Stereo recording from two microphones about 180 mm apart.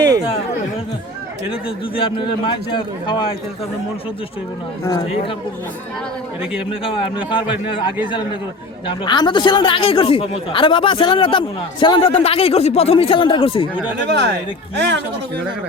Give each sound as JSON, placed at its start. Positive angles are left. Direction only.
{"t": 2.0, "sound": "speech", "side_deg": 30}
{"t": 4.9, "sound": "speech", "side_deg": 25}
{"t": 6.8, "sound": "speech", "side_deg": 30}
{"t": 14.8, "sound": "speech", "side_deg": -75}